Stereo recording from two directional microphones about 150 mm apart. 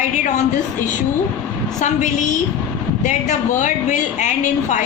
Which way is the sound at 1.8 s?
55° left (ahead or behind).